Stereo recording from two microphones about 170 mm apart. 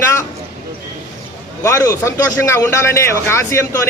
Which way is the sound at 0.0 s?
15° left (ahead or behind).